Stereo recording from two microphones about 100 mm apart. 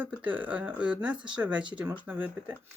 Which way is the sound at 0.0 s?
15° right (ahead or behind).